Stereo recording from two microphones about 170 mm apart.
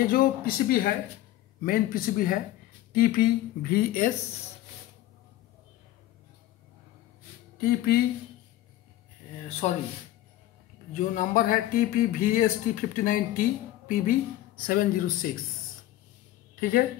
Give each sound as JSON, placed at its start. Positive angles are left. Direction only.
{"t": 0.0, "sound": "speech", "side_deg": 60}
{"t": 7.6, "sound": "speech", "side_deg": 65}
{"t": 9.6, "sound": "speech", "side_deg": 40}
{"t": 11.0, "sound": "speech", "side_deg": 50}
{"t": 16.5, "sound": "a woman's voice", "side_deg": 60}